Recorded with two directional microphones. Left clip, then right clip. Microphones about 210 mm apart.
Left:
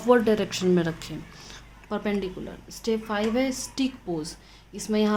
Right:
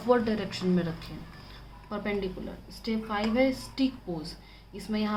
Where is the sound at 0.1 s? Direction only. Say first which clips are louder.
Left 5 dB; 55° left (ahead or behind).